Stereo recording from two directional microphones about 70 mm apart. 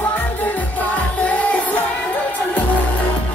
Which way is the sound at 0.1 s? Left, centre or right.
Left.